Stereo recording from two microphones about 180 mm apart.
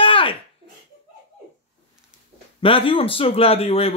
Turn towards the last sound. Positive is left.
turn(degrees=35)  # may be behind; listen again after turning